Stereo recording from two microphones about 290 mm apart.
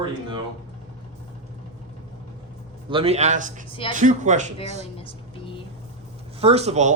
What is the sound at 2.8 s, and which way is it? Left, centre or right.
Speech, centre.